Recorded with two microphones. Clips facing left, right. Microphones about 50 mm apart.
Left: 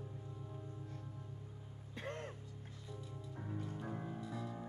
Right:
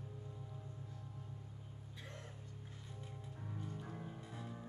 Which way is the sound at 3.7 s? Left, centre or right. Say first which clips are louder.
Left 4 dB; centre.